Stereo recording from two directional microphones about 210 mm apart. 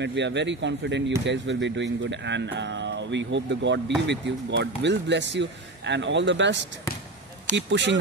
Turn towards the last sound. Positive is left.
turn(degrees=-60)  # may be behind; listen again after turning